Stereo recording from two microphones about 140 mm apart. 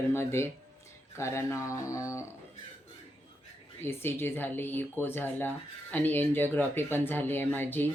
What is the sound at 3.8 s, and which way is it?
Speech, 15° left (ahead or behind).